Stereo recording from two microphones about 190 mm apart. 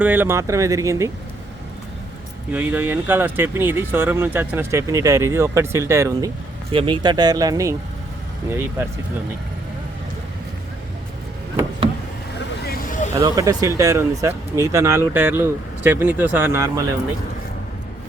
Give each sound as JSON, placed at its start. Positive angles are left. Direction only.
{"t": 0.0, "sound": "speech", "side_deg": -10}
{"t": 2.5, "sound": "speech", "side_deg": -10}
{"t": 6.7, "sound": "speech", "side_deg": -25}
{"t": 12.6, "sound": "vehicle", "side_deg": 50}
{"t": 13.1, "sound": "speech", "side_deg": -20}